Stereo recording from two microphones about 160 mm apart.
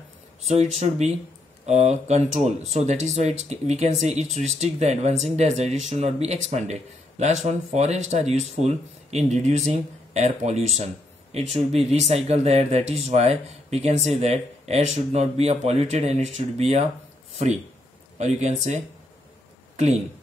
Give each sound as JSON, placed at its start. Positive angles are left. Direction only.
{"t": 0.4, "sound": "speech", "side_deg": -40}
{"t": 18.1, "sound": "speech", "side_deg": -45}